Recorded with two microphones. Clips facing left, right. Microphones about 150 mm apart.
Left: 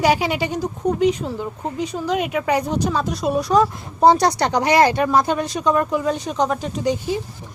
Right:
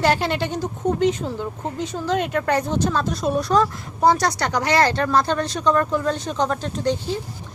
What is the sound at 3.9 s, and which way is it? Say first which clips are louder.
Speech: left 4 dB; 20° left (ahead or behind).